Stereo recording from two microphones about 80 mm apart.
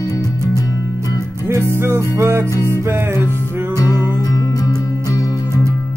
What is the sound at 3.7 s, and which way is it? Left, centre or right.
Music, left.